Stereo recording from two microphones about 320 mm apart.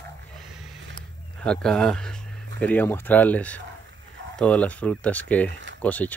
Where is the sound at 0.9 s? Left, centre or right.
Centre.